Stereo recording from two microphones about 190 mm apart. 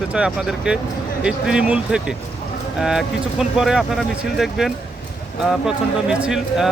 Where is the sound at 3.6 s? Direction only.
Centre (ahead or behind).